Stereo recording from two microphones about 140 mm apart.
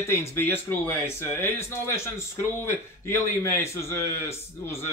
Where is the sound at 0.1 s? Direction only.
20° left (ahead or behind).